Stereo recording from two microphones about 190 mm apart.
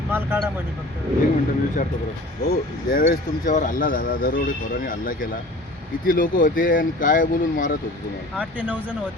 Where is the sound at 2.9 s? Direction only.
45° left (ahead or behind).